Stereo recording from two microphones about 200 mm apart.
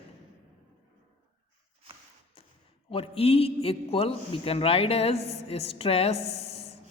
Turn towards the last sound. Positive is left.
turn(degrees=30)  # may be behind; listen again after turning